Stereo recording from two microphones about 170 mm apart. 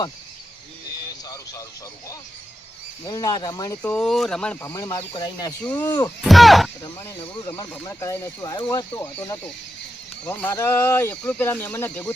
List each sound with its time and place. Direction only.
3.0 s speech: 20° left (ahead or behind)
3.8 s speech: 5° left (ahead or behind)
4.7 s speech: 20° left (ahead or behind)
6.2 s speech: centre (ahead or behind)
6.8 s speech: 25° left (ahead or behind)
10.2 s speech: 15° left (ahead or behind)